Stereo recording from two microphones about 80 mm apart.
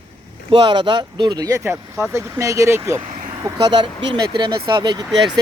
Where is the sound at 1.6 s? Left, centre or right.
Right.